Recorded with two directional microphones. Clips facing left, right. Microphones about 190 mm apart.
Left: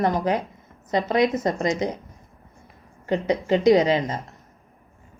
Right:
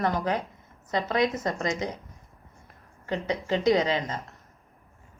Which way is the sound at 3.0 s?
20° left (ahead or behind).